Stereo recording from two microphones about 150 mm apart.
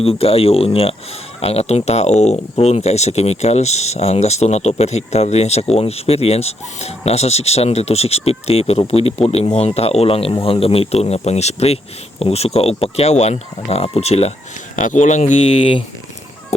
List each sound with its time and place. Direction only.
0.0 s speech: 40° left (ahead or behind)
14.8 s speech: 55° left (ahead or behind)